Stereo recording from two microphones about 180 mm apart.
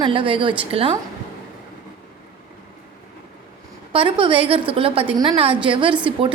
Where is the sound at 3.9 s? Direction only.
30° right (ahead or behind).